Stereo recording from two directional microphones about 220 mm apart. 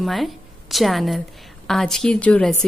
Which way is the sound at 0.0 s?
Centre (ahead or behind).